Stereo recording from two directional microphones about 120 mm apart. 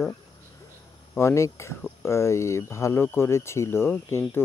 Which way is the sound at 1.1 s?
25° left (ahead or behind).